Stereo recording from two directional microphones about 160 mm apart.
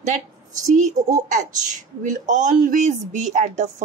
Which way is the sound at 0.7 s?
45° right (ahead or behind).